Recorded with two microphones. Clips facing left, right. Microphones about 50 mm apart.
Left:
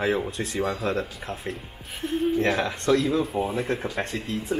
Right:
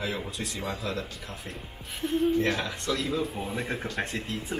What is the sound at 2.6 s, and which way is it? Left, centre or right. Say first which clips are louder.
Speech: left 8 dB; left.